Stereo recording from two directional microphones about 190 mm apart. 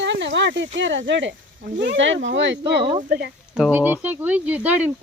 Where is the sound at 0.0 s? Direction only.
70° right (ahead or behind).